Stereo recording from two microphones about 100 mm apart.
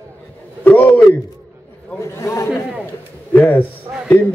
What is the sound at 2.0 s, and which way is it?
Speech, 30° left (ahead or behind).